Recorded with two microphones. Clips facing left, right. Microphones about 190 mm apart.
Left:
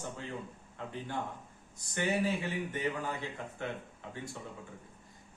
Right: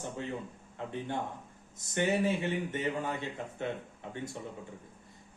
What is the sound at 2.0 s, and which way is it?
Speech, 25° right (ahead or behind).